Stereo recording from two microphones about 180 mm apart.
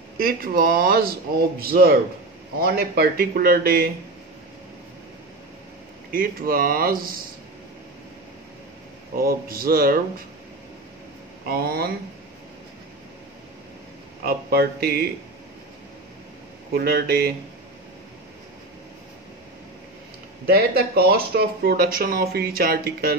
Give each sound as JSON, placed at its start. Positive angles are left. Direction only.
{"t": 0.2, "sound": "speech", "side_deg": -55}
{"t": 6.1, "sound": "speech", "side_deg": -55}
{"t": 9.1, "sound": "speech", "side_deg": -55}
{"t": 11.4, "sound": "speech", "side_deg": -55}
{"t": 14.2, "sound": "speech", "side_deg": -60}
{"t": 16.7, "sound": "speech", "side_deg": -60}
{"t": 20.4, "sound": "speech", "side_deg": -60}